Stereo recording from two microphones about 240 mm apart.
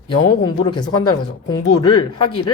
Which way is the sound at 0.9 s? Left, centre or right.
Left.